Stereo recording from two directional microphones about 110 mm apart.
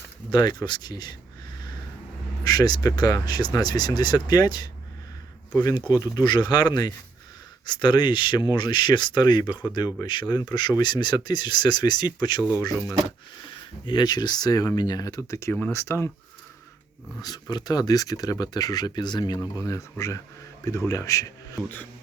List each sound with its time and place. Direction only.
0.3 s speech: 40° left (ahead or behind)
2.4 s speech: 35° left (ahead or behind)
5.9 s speech: 40° left (ahead or behind)
13.8 s speech: 40° left (ahead or behind); by 16.0 s 25° left (ahead or behind)
17.2 s speech: 35° left (ahead or behind)